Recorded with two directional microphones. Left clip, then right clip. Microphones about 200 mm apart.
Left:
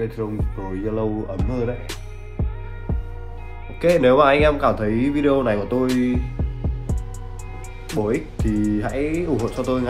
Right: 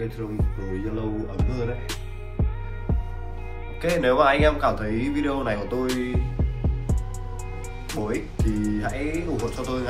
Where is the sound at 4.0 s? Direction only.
50° left (ahead or behind).